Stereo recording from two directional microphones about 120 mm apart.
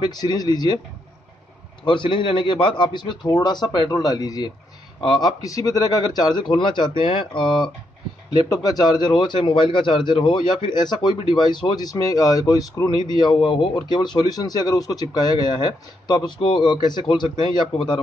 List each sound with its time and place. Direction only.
0.2 s a man's voice: 30° left (ahead or behind)
1.9 s a man's voice: 45° left (ahead or behind)
5.4 s a man's voice: 30° left (ahead or behind)
8.5 s a man's voice: 30° left (ahead or behind)